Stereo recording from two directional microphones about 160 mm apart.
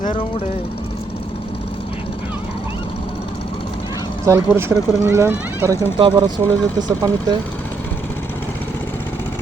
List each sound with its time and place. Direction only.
4.3 s speech: 15° right (ahead or behind)
6.0 s speech: 30° right (ahead or behind)